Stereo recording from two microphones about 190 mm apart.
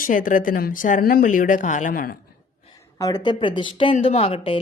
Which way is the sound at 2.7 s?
20° left (ahead or behind).